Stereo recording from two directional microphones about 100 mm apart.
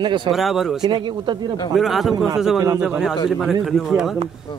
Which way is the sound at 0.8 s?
45° right (ahead or behind).